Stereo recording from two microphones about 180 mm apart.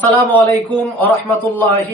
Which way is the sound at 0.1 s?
5° left (ahead or behind).